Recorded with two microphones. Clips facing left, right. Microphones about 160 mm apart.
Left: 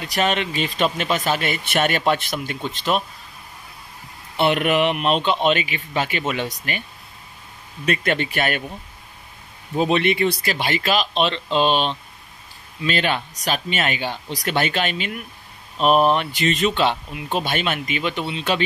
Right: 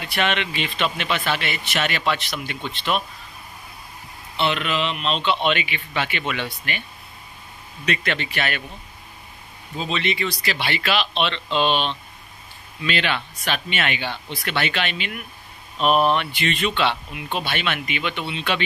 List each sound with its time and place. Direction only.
0.0 s speech: 40° left (ahead or behind)
4.4 s speech: 50° left (ahead or behind)
7.8 s speech: 45° left (ahead or behind)
9.8 s speech: 55° left (ahead or behind); by 18.6 s 40° left (ahead or behind)